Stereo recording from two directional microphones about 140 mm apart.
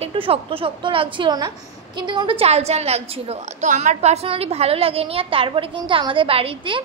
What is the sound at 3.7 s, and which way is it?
A woman's voice, 60° right (ahead or behind).